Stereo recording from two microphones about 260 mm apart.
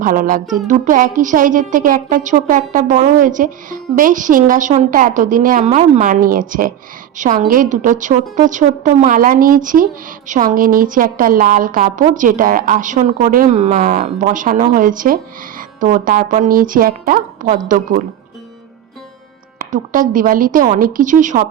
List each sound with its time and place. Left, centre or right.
0.0 s a woman's voice: right
19.5 s a woman's voice: right